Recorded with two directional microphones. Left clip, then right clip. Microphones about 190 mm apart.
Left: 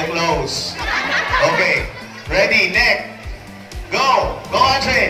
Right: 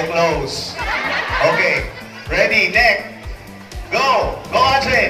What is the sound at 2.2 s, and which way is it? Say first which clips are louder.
Speech: even; 30° left (ahead or behind).